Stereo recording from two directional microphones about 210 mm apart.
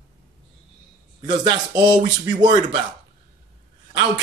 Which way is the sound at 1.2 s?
20° right (ahead or behind).